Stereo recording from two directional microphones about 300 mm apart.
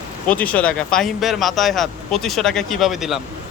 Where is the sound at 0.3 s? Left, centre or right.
Centre.